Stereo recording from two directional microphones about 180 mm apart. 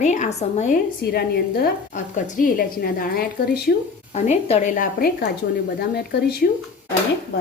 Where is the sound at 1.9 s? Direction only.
45° left (ahead or behind).